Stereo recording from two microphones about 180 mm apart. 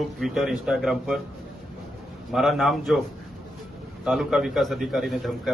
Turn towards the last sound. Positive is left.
turn(degrees=0)  # may be behind; listen again after turning